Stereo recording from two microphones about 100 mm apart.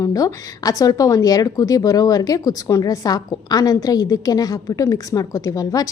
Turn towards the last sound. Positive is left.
turn(degrees=35)  # may be behind; listen again after turning